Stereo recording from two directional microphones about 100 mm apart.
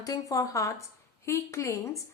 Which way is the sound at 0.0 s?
35° left (ahead or behind).